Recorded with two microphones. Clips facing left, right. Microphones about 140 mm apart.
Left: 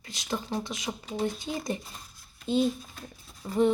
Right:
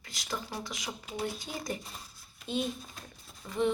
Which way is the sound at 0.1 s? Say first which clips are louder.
Left 6 dB; 25° left (ahead or behind).